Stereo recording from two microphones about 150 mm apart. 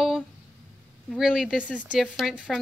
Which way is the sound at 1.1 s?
5° right (ahead or behind).